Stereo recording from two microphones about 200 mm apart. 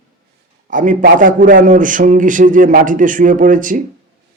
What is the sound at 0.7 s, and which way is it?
A man's voice, 40° right (ahead or behind).